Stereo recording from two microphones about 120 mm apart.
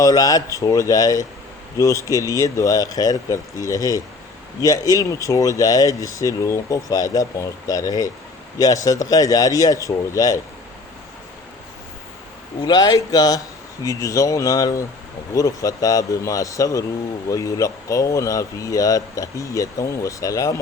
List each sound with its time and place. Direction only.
0.0 s speech: 30° left (ahead or behind)
12.6 s speech: 35° left (ahead or behind)